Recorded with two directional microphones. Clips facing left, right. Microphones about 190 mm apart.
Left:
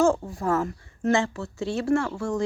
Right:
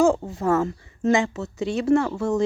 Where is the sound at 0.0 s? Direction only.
20° right (ahead or behind).